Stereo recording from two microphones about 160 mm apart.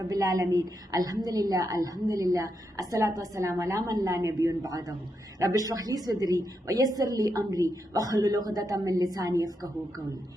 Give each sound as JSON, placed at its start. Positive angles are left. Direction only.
{"t": 0.1, "sound": "a woman's voice", "side_deg": -20}